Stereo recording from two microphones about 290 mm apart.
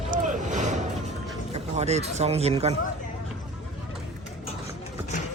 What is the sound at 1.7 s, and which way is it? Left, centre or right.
Speech, right.